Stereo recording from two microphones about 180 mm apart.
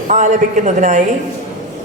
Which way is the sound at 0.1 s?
40° right (ahead or behind).